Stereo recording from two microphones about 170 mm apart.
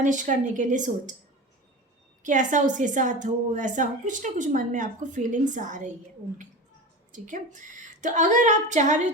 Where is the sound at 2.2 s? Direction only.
50° right (ahead or behind).